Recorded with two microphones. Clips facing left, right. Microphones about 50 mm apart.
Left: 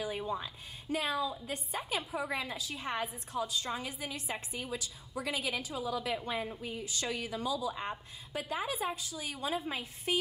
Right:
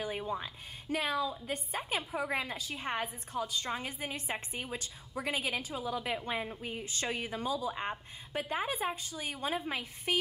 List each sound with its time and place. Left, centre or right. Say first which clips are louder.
1.0 s a woman's voice: right 2 dB; centre
6.6 s a woman's voice: even; right